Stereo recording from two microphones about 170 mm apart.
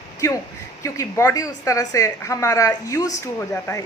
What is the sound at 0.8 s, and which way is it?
A woman's voice, 15° left (ahead or behind).